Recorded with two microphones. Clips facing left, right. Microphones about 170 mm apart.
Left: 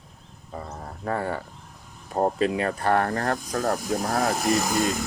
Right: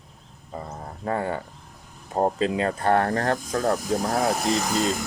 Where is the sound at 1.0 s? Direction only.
20° right (ahead or behind).